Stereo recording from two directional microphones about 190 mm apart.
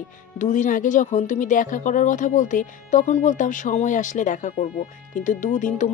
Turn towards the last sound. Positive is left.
turn(degrees=40)  # may be behind; listen again after turning